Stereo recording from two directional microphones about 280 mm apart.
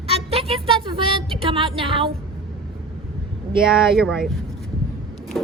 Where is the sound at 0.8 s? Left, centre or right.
Centre.